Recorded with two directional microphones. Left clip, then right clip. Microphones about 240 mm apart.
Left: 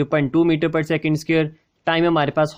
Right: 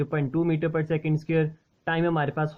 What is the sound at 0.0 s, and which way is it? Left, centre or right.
Speech, left.